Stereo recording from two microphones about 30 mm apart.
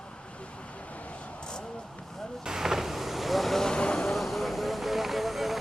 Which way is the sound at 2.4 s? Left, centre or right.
Centre.